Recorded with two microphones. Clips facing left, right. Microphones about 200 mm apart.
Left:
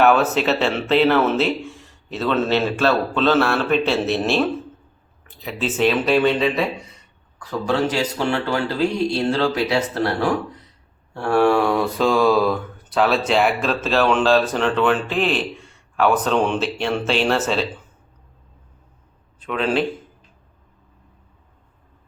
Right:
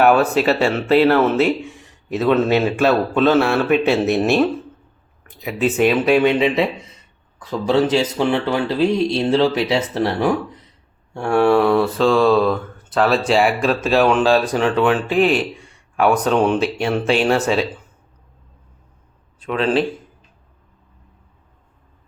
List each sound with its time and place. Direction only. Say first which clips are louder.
0.2 s mantra: right 3 dB; 5° left (ahead or behind)
0.4 s mantra: right 3 dB; 5° right (ahead or behind)
2.2 s a man's voice: right 4 dB; 10° right (ahead or behind)
4.2 s mantra: right 4 dB; 5° right (ahead or behind)
5.4 s speech: right 4 dB; centre (ahead or behind); by 10.7 s 20° right (ahead or behind)
11.1 s mantra: right 2 dB; 10° right (ahead or behind)
16.0 s a man's voice: right 3 dB; 10° right (ahead or behind)
17.4 s mantra: right 3 dB; centre (ahead or behind)
19.5 s mantra: right 3 dB; centre (ahead or behind)